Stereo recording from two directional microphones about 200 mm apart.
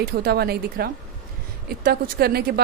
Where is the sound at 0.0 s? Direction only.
50° right (ahead or behind).